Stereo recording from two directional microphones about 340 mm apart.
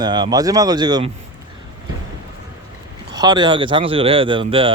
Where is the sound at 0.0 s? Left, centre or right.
Centre.